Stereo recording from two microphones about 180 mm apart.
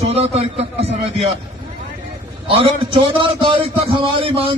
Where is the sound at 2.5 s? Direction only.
30° right (ahead or behind).